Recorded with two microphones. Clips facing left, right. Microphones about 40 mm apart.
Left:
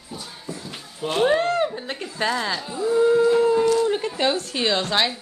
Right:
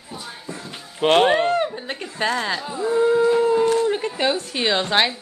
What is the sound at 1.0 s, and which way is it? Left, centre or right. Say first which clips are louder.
Speech: right 6 dB; right.